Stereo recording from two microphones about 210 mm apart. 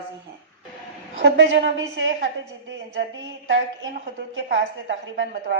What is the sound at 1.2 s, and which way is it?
A woman's voice, 60° right (ahead or behind).